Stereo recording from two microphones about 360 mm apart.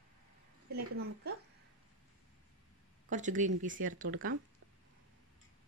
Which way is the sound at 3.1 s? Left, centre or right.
Right.